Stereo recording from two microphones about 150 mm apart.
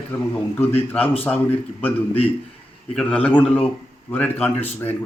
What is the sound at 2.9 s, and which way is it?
A man's voice, 10° left (ahead or behind).